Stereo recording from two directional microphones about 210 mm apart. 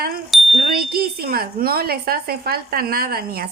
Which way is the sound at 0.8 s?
45° right (ahead or behind).